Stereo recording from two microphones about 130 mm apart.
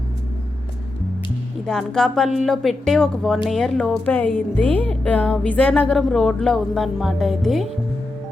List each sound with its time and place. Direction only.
1.6 s speech: 5° left (ahead or behind)